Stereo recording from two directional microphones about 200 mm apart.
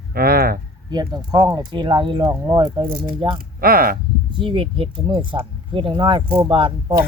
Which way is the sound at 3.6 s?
45° right (ahead or behind).